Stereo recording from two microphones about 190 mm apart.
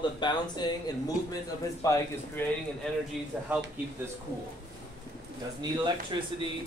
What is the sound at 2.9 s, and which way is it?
Speech, 5° left (ahead or behind).